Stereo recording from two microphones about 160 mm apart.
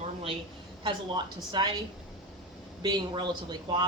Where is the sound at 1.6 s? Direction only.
30° right (ahead or behind).